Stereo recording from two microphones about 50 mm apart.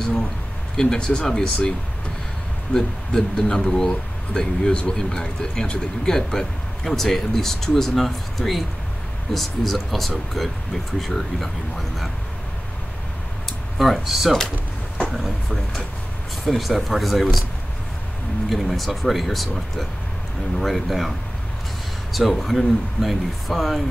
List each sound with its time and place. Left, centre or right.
0.7 s speech: centre
2.7 s speech: left
3.1 s speech: centre
13.7 s speech: centre
18.5 s speech: centre
22.1 s speech: centre